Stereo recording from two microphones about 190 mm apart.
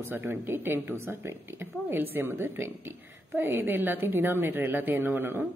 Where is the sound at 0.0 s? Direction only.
10° right (ahead or behind).